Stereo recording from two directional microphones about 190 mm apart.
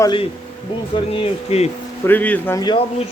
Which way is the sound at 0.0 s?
25° left (ahead or behind).